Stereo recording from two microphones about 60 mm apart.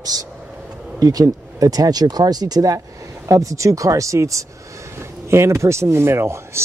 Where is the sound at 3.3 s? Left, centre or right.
Right.